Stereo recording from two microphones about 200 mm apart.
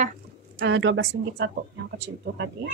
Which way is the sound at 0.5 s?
65° right (ahead or behind).